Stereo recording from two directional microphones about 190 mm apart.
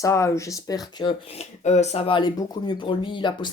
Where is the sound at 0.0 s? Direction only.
15° left (ahead or behind).